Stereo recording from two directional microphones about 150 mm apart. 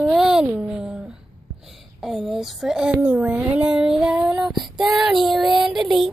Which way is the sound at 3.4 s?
5° right (ahead or behind).